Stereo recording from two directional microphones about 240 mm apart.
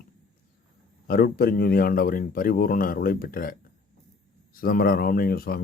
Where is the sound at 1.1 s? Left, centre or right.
Left.